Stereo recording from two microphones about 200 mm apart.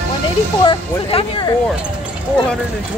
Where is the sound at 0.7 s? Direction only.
25° left (ahead or behind).